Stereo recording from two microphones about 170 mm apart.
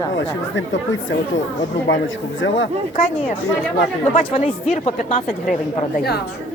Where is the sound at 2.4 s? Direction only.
90° left.